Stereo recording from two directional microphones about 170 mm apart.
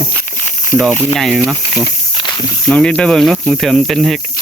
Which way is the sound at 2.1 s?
25° left (ahead or behind).